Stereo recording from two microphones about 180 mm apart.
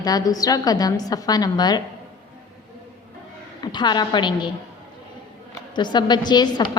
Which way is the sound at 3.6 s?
25° left (ahead or behind).